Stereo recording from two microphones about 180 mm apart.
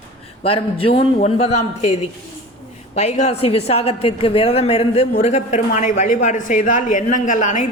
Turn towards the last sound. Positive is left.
turn(degrees=45)  # may be behind; listen again after turning